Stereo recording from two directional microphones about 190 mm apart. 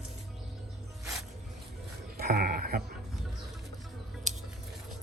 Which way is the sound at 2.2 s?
50° right (ahead or behind).